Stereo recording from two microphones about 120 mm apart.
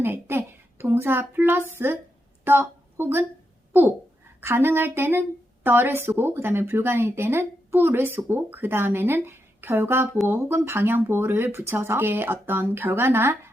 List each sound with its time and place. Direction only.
0.0 s a child's voice: 20° right (ahead or behind)
3.7 s a sound: 20° right (ahead or behind)
4.4 s a woman's voice: 20° right (ahead or behind)